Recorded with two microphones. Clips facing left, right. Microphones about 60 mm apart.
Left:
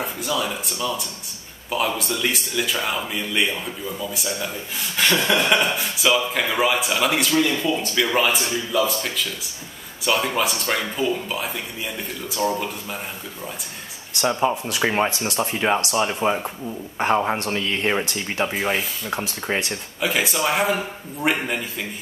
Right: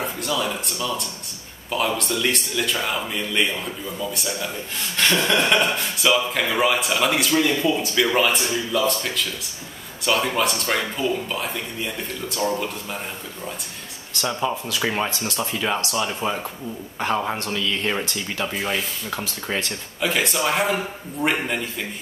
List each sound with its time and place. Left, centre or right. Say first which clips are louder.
0.0 s speech: even; centre
14.2 s speech: left 4 dB; left
18.5 s speech: left 2 dB; centre
19.4 s speech: left 2 dB; left
20.0 s speech: even; centre